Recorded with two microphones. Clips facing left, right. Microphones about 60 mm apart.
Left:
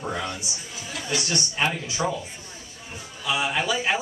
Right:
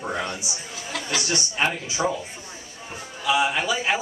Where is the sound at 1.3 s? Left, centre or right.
Centre.